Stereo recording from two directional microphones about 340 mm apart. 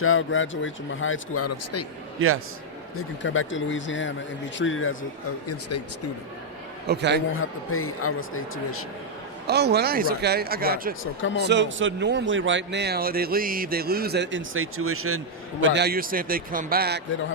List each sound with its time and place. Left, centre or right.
0.0 s speech: left
2.1 s a man's voice: right
3.0 s speech: left
6.8 s speech: right
7.3 s speech: left
9.5 s speech: right
11.0 s speech: left
11.4 s a man's voice: right